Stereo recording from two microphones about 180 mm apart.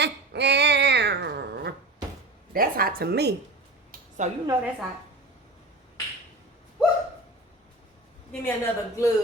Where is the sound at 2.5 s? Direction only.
55° right (ahead or behind).